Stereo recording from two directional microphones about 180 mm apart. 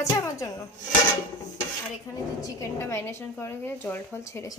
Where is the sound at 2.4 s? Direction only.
15° left (ahead or behind).